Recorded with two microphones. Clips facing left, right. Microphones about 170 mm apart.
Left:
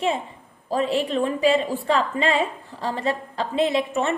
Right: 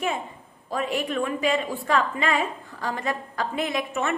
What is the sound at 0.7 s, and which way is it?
A woman's voice, 30° left (ahead or behind).